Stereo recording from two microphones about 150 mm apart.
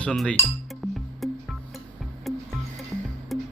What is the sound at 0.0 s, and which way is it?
Speech, 5° left (ahead or behind).